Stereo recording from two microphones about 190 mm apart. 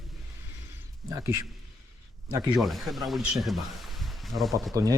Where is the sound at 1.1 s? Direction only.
15° right (ahead or behind).